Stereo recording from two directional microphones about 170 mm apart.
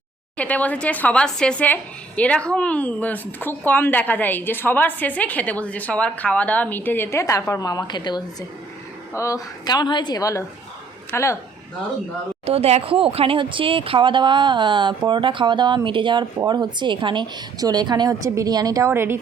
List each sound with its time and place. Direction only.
0.3 s a woman's voice: 10° left (ahead or behind)
12.5 s speech: 35° right (ahead or behind); by 19.2 s 15° right (ahead or behind)